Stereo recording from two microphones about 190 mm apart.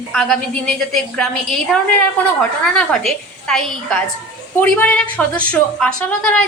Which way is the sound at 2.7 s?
5° left (ahead or behind).